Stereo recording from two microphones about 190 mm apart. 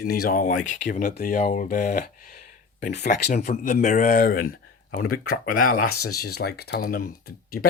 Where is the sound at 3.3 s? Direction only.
40° left (ahead or behind).